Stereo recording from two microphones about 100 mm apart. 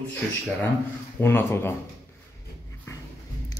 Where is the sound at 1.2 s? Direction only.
25° left (ahead or behind).